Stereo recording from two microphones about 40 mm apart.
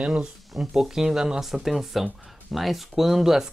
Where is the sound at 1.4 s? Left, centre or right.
Centre.